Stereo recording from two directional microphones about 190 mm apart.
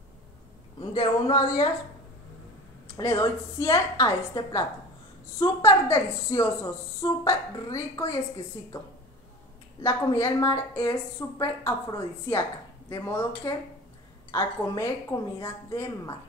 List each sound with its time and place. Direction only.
0.7 s speech: 25° left (ahead or behind)
3.0 s a woman's voice: 15° left (ahead or behind)
9.8 s a woman's voice: 15° left (ahead or behind)